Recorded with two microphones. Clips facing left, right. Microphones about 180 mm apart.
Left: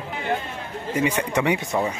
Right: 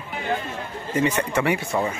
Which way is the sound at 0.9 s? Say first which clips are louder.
Right 1 dB; 10° left (ahead or behind).